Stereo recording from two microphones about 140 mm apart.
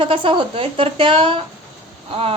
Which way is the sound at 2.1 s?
45° right (ahead or behind).